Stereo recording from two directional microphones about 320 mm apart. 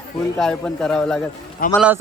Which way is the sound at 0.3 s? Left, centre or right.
Centre.